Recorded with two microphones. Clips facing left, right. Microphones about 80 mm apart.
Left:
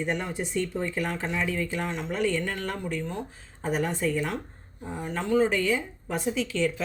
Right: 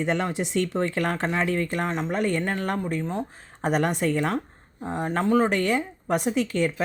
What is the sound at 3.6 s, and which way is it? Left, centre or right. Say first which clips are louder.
Speech: right 4 dB; right.